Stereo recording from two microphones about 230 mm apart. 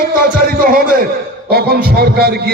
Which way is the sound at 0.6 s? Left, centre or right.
Right.